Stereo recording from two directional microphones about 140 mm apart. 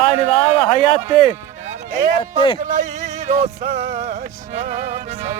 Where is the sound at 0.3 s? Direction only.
45° left (ahead or behind).